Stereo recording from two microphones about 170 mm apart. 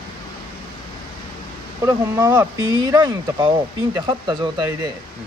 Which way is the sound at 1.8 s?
20° right (ahead or behind).